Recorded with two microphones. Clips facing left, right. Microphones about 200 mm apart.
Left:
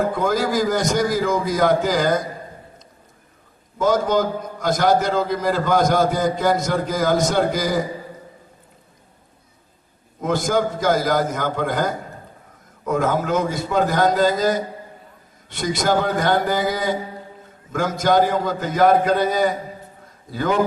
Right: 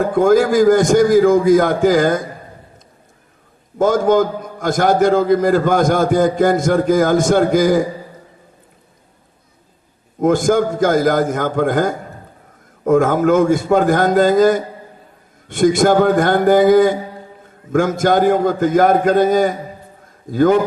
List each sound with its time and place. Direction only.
0.1 s a man's voice: 50° right (ahead or behind)
3.8 s a man's voice: 50° right (ahead or behind)
10.2 s a man's voice: 50° right (ahead or behind)